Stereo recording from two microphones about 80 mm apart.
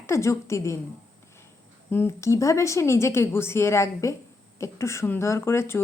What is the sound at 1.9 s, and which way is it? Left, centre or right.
Speech, left.